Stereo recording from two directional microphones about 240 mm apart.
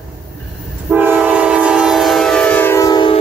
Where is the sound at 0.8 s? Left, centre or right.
Centre.